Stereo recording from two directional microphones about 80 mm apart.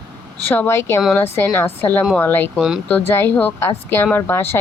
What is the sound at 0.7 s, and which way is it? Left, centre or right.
Speech, left.